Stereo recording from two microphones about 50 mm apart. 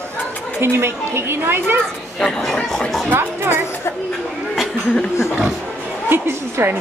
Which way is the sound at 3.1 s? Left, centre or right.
Right.